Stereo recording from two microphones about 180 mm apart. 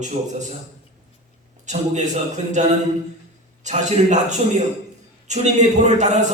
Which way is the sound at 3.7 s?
40° right (ahead or behind).